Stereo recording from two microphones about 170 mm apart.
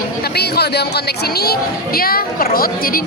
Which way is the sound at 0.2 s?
70° left (ahead or behind).